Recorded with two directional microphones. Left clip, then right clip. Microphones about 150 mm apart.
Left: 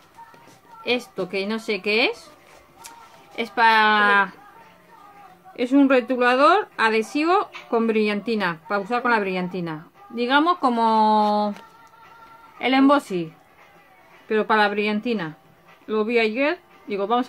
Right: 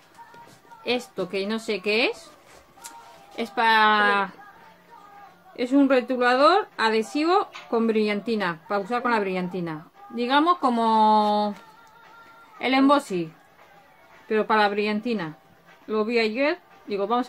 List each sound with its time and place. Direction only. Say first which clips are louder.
0.8 s speech: left 2 dB; 15° left (ahead or behind)
3.3 s speech: left 3 dB; 20° left (ahead or behind)
5.6 s speech: left 2 dB; 20° left (ahead or behind)
12.5 s speech: left 2 dB; 15° left (ahead or behind)